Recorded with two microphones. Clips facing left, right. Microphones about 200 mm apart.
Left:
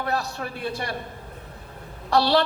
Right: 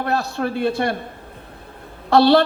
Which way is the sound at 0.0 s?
60° right (ahead or behind).